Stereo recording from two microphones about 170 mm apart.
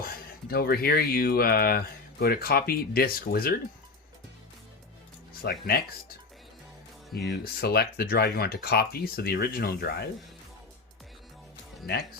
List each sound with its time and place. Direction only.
0.0 s speech: 65° left (ahead or behind)
5.4 s speech: 65° left (ahead or behind)
7.1 s speech: 75° left (ahead or behind)